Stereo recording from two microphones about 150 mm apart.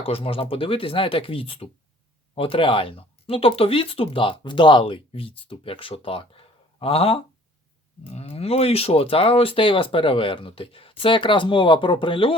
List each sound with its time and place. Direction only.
0.0 s speech: 40° left (ahead or behind)